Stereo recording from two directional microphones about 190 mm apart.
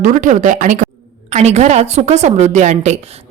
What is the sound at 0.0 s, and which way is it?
A woman's voice, 40° right (ahead or behind).